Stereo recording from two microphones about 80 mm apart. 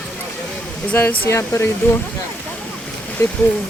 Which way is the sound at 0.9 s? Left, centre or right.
Left.